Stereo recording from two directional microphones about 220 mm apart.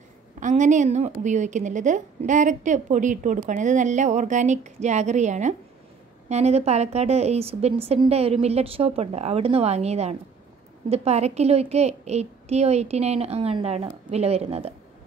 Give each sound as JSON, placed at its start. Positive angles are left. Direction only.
{"t": 0.4, "sound": "a woman's voice", "side_deg": -35}